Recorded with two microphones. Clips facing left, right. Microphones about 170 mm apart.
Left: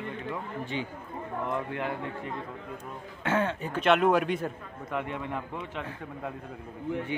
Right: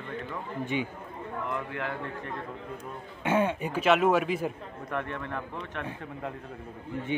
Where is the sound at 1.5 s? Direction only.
20° left (ahead or behind).